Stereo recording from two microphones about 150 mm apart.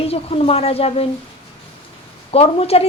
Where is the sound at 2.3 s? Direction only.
40° left (ahead or behind).